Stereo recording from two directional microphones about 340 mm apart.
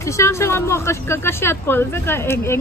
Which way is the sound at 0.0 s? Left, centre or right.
Centre.